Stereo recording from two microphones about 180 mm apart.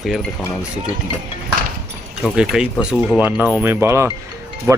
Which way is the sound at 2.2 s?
5° right (ahead or behind).